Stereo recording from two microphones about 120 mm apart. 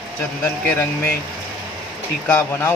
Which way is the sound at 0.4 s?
15° left (ahead or behind).